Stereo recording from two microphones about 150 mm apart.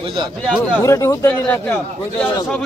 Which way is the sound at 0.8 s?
20° left (ahead or behind).